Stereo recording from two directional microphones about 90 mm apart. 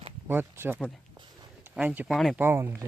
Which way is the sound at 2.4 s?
25° right (ahead or behind).